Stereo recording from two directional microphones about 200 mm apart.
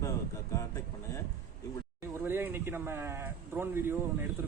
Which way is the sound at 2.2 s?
10° right (ahead or behind).